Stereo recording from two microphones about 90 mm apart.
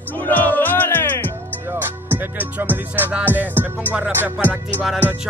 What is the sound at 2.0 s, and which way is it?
Music, 20° right (ahead or behind).